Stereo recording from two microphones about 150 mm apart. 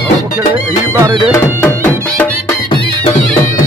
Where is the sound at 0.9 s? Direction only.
25° right (ahead or behind).